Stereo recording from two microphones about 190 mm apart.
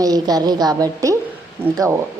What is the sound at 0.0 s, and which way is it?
A woman's voice, 20° right (ahead or behind).